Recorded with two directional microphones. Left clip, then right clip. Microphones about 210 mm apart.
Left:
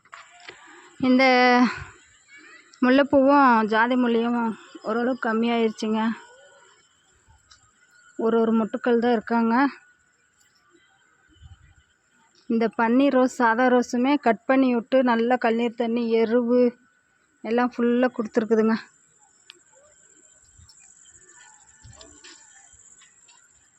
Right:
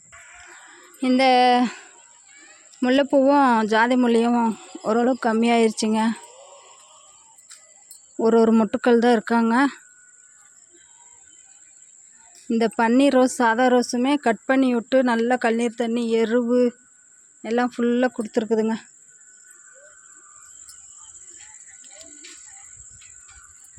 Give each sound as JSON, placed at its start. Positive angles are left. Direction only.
{"t": 0.7, "sound": "speech", "side_deg": -5}
{"t": 8.2, "sound": "speech", "side_deg": -25}
{"t": 12.5, "sound": "speech", "side_deg": -15}